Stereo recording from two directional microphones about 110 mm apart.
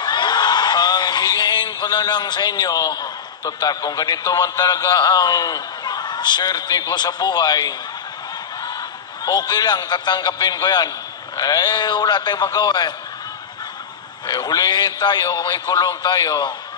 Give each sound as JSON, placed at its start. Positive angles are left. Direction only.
{"t": 0.0, "sound": "a man's voice", "side_deg": 40}
{"t": 9.2, "sound": "a man's voice", "side_deg": 35}
{"t": 14.2, "sound": "a man's voice", "side_deg": 40}